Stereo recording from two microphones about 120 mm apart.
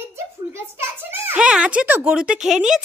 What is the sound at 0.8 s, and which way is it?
Speech, 20° right (ahead or behind).